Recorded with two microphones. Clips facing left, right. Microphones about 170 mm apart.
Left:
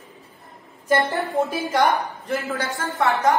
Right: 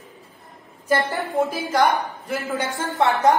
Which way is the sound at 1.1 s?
Centre (ahead or behind).